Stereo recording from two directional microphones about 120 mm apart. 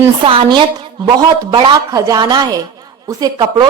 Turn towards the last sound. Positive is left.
turn(degrees=-35)  # may be behind; listen again after turning